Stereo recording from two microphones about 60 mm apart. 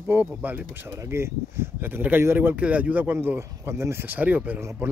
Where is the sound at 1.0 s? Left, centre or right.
Right.